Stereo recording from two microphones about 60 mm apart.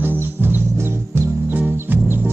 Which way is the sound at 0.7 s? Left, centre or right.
Right.